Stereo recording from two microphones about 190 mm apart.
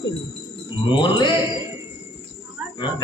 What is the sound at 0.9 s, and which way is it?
Speech, 25° left (ahead or behind).